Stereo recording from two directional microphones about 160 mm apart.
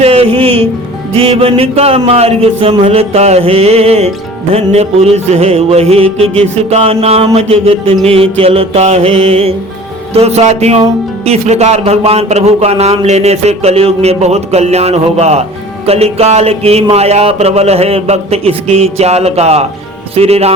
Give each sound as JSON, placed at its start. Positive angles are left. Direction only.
{"t": 0.0, "sound": "music", "side_deg": -40}
{"t": 1.1, "sound": "speech", "side_deg": -35}